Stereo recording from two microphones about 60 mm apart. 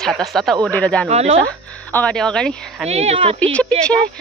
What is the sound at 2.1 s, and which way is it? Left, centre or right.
Cricket, centre.